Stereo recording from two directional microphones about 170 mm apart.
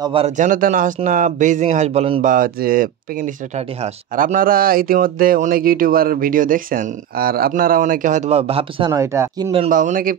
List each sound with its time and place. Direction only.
0.0 s speech: 30° right (ahead or behind)
0.4 s speech: 50° right (ahead or behind); by 2.2 s 35° right (ahead or behind)
2.2 s speech: 55° right (ahead or behind); by 8.9 s 35° right (ahead or behind)
8.9 s speech: 15° right (ahead or behind)
9.7 s speech: 50° right (ahead or behind)